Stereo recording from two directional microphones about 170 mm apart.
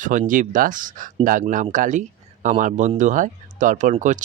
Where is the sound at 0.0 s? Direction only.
50° right (ahead or behind).